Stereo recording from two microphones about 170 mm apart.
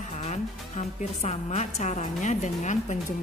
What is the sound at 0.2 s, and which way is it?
A woman's voice, 40° left (ahead or behind).